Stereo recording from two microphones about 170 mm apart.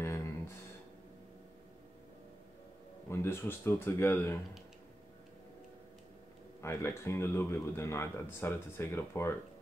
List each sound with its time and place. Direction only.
0.0 s a sound: 15° left (ahead or behind)
3.1 s speech: 15° left (ahead or behind)
6.6 s speech: 15° left (ahead or behind)